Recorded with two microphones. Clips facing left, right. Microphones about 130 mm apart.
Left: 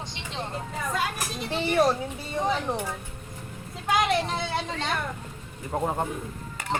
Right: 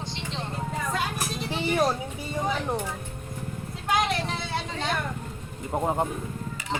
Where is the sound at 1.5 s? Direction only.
5° right (ahead or behind).